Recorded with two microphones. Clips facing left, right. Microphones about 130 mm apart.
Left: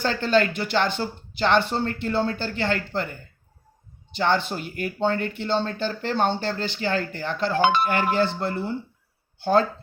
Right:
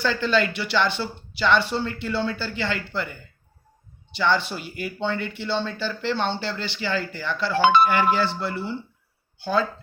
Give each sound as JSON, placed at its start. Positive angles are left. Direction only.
{"t": 0.0, "sound": "speech", "side_deg": 45}